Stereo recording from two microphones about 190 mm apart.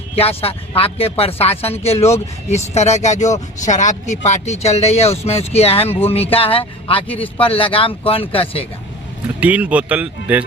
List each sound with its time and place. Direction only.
0.2 s speech: 30° left (ahead or behind)
9.4 s speech: 5° right (ahead or behind)